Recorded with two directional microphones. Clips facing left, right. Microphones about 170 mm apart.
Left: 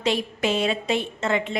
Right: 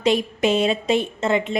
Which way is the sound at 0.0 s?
20° right (ahead or behind).